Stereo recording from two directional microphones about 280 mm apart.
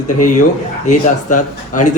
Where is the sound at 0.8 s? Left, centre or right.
Left.